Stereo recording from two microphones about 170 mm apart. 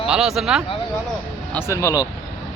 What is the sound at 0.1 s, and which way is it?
Speech, centre (ahead or behind).